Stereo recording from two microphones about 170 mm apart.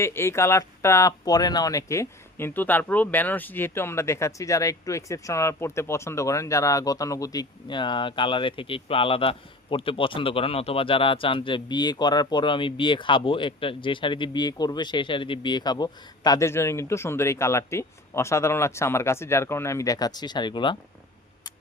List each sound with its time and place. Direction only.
0.0 s speech: 15° left (ahead or behind)